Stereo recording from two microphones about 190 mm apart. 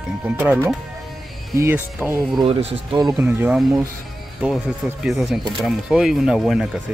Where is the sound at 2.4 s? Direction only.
30° right (ahead or behind).